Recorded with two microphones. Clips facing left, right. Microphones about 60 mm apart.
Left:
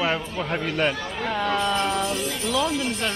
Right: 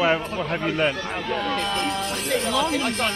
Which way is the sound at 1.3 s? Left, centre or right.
Centre.